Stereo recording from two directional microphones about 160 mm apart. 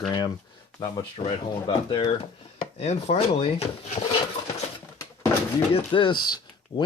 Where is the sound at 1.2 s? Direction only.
35° left (ahead or behind).